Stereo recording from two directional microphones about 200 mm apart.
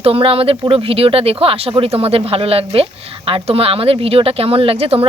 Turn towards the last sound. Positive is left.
turn(degrees=-30)  # may be behind; listen again after turning